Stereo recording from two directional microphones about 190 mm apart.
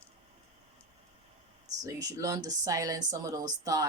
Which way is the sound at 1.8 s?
20° right (ahead or behind).